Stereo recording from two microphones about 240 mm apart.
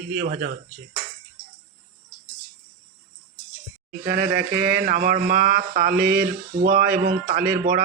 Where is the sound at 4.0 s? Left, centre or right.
Right.